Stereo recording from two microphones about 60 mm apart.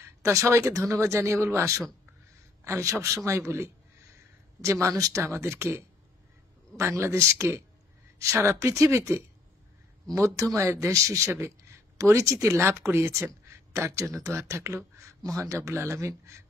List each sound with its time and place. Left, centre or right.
0.2 s speech: right
2.6 s speech: right
3.3 s speech: right
4.6 s speech: right
5.2 s speech: right
15.7 s speech: right